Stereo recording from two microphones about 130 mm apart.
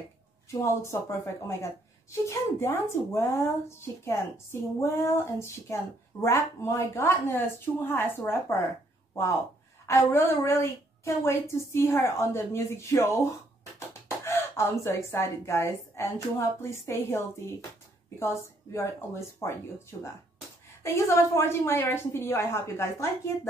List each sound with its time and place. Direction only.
0.5 s speech: 25° left (ahead or behind)
9.8 s speech: 20° left (ahead or behind)
14.2 s speech: 20° left (ahead or behind)
18.7 s speech: 20° left (ahead or behind)
20.8 s speech: 20° left (ahead or behind)